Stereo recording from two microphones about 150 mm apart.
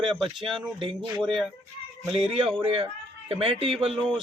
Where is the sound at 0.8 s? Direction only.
35° right (ahead or behind).